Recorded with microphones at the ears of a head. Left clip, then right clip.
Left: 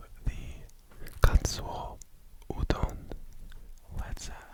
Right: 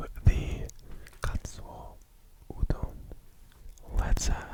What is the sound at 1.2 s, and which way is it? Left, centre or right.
Whispering, left.